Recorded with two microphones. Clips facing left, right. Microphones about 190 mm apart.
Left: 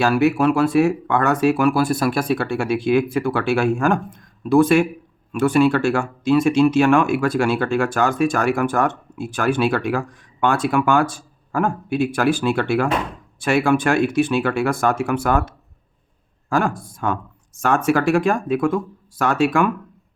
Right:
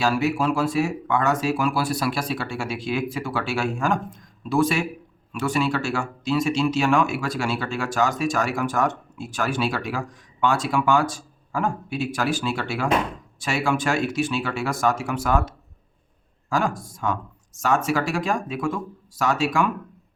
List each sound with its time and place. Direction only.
0.0 s speech: 60° left (ahead or behind)